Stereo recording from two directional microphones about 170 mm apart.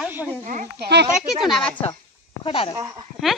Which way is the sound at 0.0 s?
10° right (ahead or behind).